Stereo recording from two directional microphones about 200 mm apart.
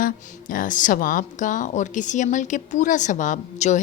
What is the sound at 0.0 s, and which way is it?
A woman's voice, 45° left (ahead or behind).